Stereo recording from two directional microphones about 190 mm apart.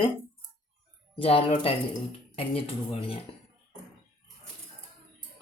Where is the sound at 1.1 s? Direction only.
30° left (ahead or behind).